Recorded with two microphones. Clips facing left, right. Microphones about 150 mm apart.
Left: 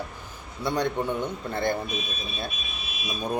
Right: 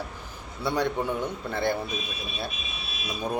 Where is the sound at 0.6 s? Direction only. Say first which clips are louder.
Even; 10° right (ahead or behind).